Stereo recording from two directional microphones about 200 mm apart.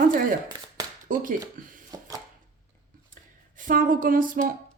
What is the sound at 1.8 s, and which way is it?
Chopping, 15° right (ahead or behind).